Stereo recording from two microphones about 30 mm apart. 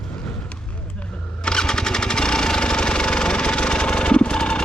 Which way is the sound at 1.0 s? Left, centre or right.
Left.